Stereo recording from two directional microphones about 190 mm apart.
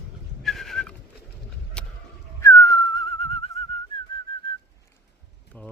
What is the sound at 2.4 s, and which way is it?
Whistling, 20° left (ahead or behind).